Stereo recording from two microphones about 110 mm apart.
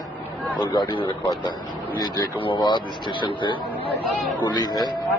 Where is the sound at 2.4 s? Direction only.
50° left (ahead or behind).